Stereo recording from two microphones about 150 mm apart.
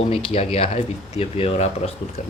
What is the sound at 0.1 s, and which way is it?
Speech, 40° left (ahead or behind).